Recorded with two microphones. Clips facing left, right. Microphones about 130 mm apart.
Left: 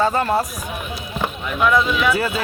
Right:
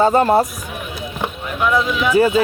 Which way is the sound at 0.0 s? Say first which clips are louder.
Right 5 dB; 25° right (ahead or behind).